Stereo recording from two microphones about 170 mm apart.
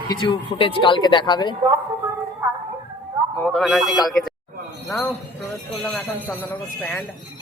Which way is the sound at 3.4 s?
Centre (ahead or behind).